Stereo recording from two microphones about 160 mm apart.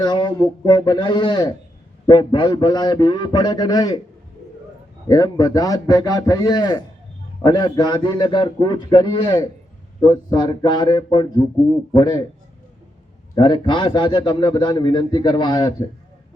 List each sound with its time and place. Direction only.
0.0 s a man's voice: 25° left (ahead or behind)
5.0 s a man's voice: 20° left (ahead or behind)
13.3 s a man's voice: 30° left (ahead or behind)